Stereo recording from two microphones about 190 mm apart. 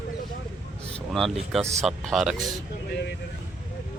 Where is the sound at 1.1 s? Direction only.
Centre (ahead or behind).